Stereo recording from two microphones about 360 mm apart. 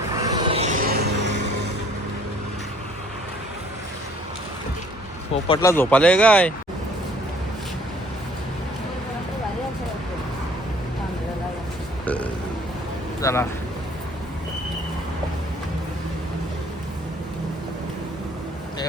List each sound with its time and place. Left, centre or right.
0.1 s music: centre; by 1.7 s right
5.5 s speech: centre
12.0 s burping: centre
13.2 s speech: centre